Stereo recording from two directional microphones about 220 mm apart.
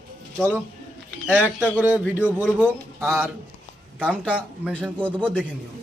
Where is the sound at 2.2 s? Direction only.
10° left (ahead or behind).